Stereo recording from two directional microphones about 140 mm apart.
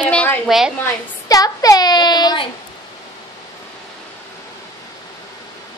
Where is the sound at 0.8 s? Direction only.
25° left (ahead or behind).